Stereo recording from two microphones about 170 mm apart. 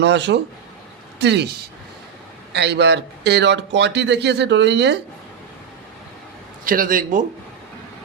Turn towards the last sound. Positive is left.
turn(degrees=-55)  # may be behind; listen again after turning